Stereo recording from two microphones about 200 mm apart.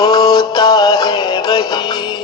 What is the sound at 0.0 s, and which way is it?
Music, 20° left (ahead or behind).